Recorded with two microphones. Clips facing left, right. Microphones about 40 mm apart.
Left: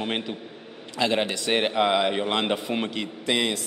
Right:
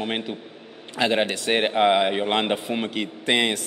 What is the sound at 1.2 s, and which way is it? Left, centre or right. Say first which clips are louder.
Speech: right 3 dB; right.